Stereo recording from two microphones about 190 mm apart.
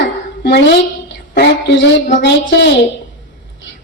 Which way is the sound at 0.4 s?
65° left (ahead or behind).